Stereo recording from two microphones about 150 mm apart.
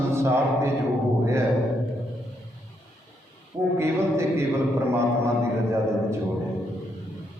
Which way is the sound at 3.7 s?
15° right (ahead or behind).